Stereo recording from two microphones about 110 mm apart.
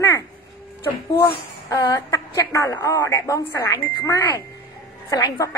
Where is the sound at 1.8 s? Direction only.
30° left (ahead or behind).